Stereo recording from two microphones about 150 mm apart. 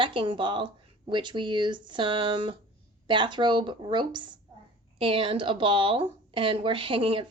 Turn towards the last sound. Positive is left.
turn(degrees=-35)  # may be behind; listen again after turning